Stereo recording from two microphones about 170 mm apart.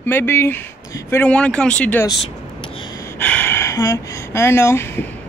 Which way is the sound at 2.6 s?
30° left (ahead or behind).